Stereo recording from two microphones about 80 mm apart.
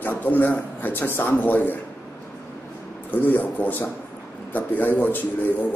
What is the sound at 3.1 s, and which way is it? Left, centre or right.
A man's voice, left.